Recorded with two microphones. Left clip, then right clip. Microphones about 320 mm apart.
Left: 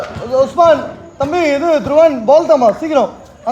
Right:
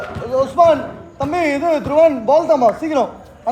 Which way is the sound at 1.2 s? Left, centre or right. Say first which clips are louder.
Left 4 dB; left.